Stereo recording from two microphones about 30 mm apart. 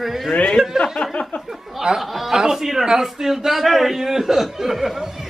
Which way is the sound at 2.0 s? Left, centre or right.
Centre.